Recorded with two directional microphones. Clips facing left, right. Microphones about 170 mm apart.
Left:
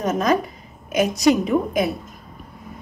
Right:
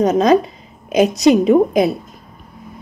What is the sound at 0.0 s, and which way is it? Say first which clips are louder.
A woman's voice: right 7 dB; 20° right (ahead or behind).